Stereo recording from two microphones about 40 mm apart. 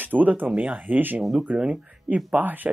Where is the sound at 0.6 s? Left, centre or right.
Right.